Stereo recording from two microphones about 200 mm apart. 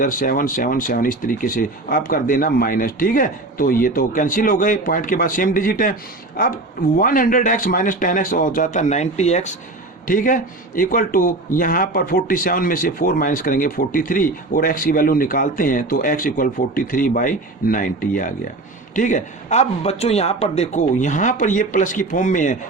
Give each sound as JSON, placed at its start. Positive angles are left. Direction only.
{"t": 0.0, "sound": "speech", "side_deg": 45}